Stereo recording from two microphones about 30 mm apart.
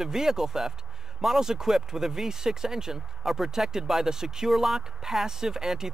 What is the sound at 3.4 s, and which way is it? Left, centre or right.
Speech, centre.